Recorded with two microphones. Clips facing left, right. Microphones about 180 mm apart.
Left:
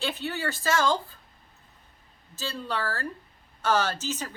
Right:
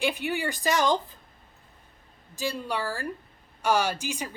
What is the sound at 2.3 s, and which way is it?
Speech, 15° right (ahead or behind).